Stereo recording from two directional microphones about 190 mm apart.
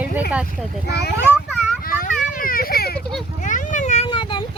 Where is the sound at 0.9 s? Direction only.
60° left (ahead or behind).